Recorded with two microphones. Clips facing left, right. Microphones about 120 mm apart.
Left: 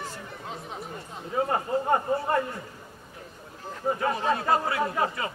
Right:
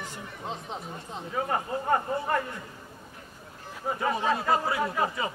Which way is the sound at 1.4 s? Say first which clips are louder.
Left 2 dB; 25° left (ahead or behind).